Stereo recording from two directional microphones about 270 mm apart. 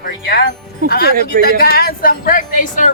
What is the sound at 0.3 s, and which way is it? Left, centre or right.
Music, left.